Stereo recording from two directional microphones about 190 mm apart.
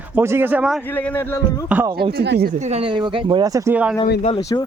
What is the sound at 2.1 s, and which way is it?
Speech, 60° right (ahead or behind).